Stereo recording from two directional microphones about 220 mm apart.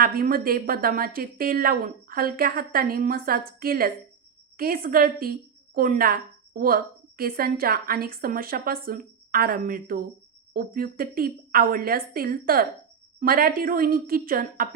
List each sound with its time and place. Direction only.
0.0 s a woman's voice: 40° right (ahead or behind)